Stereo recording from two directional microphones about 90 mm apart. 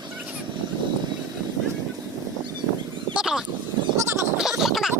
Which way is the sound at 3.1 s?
5° right (ahead or behind).